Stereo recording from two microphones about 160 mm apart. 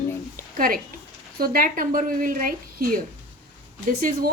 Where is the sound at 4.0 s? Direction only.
65° right (ahead or behind).